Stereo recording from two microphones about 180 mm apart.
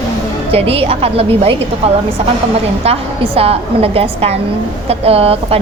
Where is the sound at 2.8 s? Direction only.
35° right (ahead or behind).